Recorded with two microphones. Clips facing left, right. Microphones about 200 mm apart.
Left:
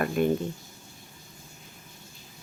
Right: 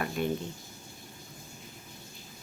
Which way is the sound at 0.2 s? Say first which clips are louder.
Left 7 dB; 50° left (ahead or behind).